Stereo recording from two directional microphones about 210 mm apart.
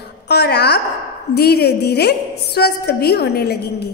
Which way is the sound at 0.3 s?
50° left (ahead or behind).